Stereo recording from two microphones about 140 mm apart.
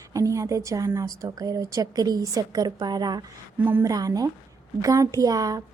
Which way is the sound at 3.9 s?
25° right (ahead or behind).